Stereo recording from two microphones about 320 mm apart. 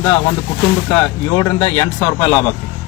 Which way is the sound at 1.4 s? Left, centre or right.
Centre.